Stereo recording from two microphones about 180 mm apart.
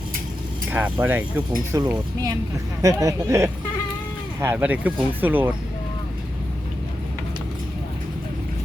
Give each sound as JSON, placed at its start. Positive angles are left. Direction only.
{"t": 0.7, "sound": "speech", "side_deg": -10}